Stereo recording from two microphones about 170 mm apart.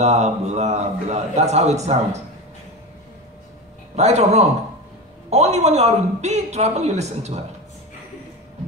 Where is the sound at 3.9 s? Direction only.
40° right (ahead or behind).